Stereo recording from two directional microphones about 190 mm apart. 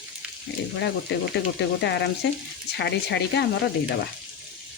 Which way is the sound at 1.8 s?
60° left (ahead or behind).